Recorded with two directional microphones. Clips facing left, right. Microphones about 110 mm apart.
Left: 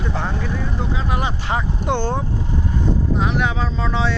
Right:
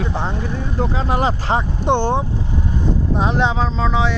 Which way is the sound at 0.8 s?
35° right (ahead or behind).